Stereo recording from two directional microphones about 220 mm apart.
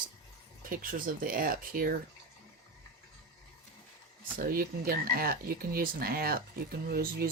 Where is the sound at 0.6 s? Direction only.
40° right (ahead or behind).